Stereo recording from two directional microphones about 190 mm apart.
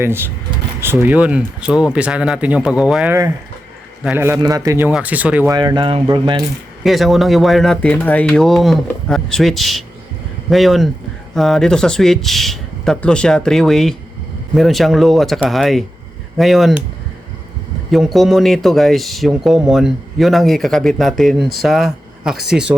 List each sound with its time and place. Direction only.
0.8 s speech: 10° right (ahead or behind)
5.5 s speech: 25° right (ahead or behind)
6.8 s speech: centre (ahead or behind)
17.9 s speech: centre (ahead or behind)